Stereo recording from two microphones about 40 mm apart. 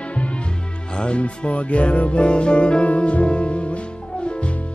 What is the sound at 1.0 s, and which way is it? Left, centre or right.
Music, left.